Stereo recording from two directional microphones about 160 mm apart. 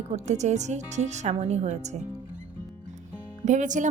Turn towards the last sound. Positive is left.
turn(degrees=-50)  # may be behind; listen again after turning